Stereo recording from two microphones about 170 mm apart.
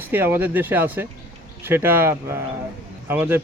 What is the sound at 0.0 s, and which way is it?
Speech, 10° right (ahead or behind).